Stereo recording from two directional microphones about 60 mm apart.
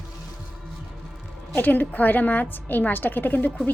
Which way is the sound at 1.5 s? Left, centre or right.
Left.